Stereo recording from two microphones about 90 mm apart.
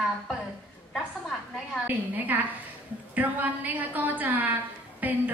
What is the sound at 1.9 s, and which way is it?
A woman's voice, 20° right (ahead or behind).